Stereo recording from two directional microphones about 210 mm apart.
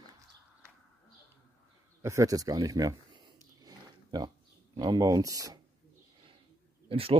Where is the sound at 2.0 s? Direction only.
15° right (ahead or behind).